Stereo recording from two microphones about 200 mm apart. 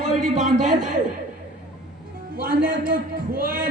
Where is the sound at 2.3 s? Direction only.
45° right (ahead or behind).